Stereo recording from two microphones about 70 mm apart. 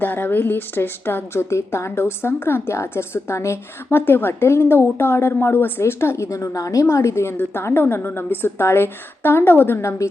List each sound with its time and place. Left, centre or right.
0.0 s a woman's voice: left
6.3 s a woman's voice: left